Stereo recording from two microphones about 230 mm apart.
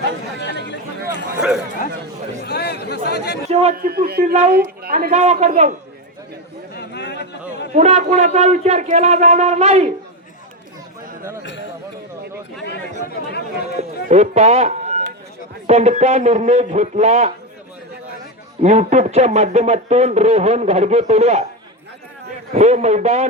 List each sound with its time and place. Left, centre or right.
0.4 s a sound: left
2.4 s chatter: left
3.5 s a man's voice: right
3.8 s a man's voice: right
6.7 s chatter: left
7.7 s speech: right
13.7 s speech: right
18.6 s speech: right
22.5 s speech: right